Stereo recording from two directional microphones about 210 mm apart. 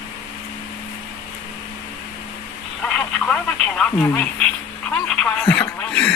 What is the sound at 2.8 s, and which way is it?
Radio, 5° left (ahead or behind).